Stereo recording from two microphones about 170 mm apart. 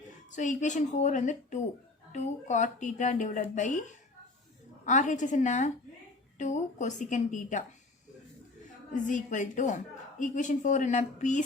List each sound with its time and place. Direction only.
0.3 s a woman's voice: 45° left (ahead or behind)
9.0 s a woman's voice: 50° left (ahead or behind)